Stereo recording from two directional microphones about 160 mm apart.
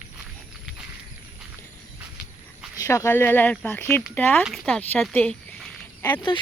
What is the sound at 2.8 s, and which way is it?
Speech, 20° left (ahead or behind).